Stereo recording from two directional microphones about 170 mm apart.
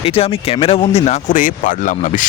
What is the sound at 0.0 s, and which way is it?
Speech, 35° left (ahead or behind).